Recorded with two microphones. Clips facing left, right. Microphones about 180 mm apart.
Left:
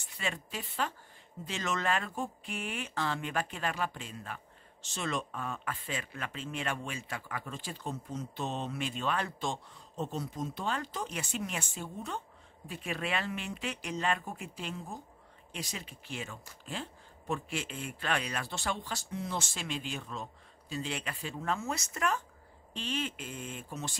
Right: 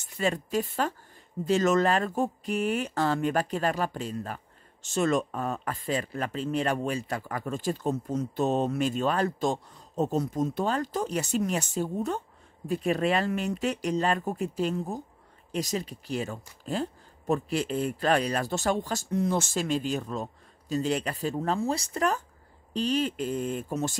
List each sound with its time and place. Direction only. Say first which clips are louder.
0.0 s speech: right 10 dB; 40° right (ahead or behind)